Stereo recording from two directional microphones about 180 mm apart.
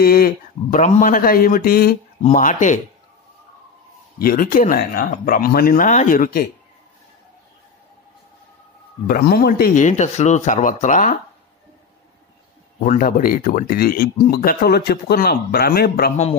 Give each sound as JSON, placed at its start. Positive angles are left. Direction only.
{"t": 0.0, "sound": "speech", "side_deg": 55}
{"t": 2.2, "sound": "speech", "side_deg": 45}
{"t": 4.2, "sound": "speech", "side_deg": 50}
{"t": 9.0, "sound": "speech", "side_deg": 60}
{"t": 12.8, "sound": "speech", "side_deg": 45}